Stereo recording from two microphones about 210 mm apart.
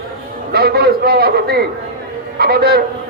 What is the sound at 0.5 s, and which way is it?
A man's voice, 50° right (ahead or behind).